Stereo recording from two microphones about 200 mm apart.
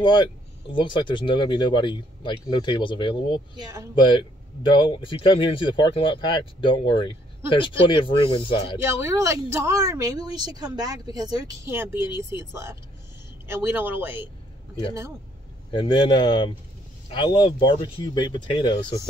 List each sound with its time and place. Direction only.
0.0 s speech: 25° left (ahead or behind)
3.6 s a woman's voice: 15° right (ahead or behind)
4.0 s speech: 25° left (ahead or behind)
8.8 s a woman's voice: 15° right (ahead or behind)
15.7 s speech: 25° left (ahead or behind)